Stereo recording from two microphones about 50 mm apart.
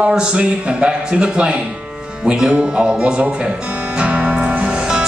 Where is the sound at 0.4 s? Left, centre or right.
Centre.